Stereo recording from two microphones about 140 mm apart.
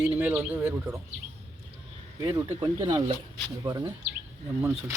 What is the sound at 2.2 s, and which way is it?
Speech, 30° right (ahead or behind).